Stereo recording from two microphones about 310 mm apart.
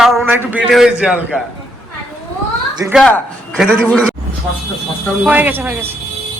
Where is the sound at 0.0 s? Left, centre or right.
Centre.